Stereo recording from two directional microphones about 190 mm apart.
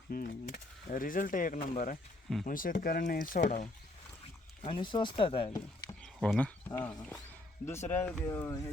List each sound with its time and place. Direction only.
0.1 s speech: 45° left (ahead or behind)
4.6 s speech: 25° left (ahead or behind)
6.2 s speech: 5° left (ahead or behind)